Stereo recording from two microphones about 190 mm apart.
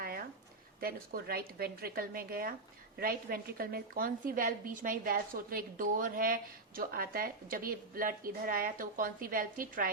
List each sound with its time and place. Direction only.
0.8 s a woman's voice: 50° right (ahead or behind)